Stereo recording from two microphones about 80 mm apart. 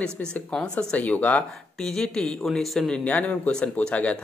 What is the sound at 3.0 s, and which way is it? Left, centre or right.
Speech, centre.